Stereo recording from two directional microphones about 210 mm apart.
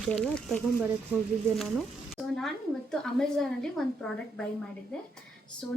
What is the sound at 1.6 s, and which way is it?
Speech, centre (ahead or behind).